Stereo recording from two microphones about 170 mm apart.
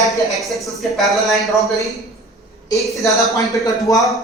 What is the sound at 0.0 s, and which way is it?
A man's voice, centre (ahead or behind).